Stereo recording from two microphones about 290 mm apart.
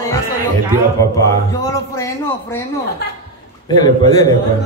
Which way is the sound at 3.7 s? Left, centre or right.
Centre.